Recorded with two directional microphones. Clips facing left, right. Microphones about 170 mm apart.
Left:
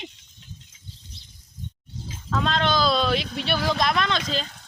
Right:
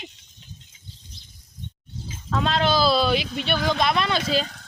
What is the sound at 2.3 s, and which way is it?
Speech, 5° right (ahead or behind).